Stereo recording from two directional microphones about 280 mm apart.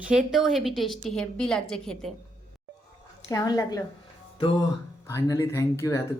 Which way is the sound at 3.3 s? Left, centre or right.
Centre.